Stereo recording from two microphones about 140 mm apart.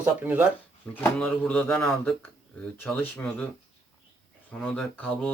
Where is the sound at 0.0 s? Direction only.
10° right (ahead or behind).